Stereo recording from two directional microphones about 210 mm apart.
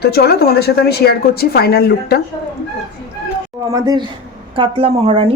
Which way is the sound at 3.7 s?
15° right (ahead or behind).